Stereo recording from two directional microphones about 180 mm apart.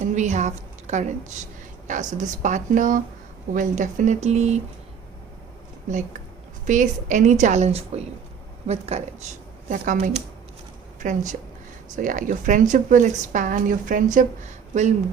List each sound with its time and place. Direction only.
0.0 s a sound: 40° right (ahead or behind)
1.9 s a woman's voice: 45° right (ahead or behind)
5.9 s a woman's voice: 45° right (ahead or behind)